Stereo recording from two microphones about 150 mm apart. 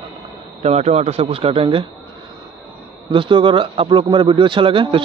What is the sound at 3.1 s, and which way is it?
A man's voice, 35° right (ahead or behind).